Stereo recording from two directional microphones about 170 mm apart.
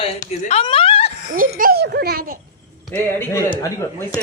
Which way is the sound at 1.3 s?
55° right (ahead or behind).